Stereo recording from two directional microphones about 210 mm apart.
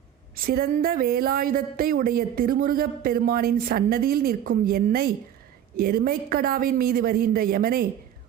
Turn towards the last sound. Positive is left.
turn(degrees=-45)  # may be behind; listen again after turning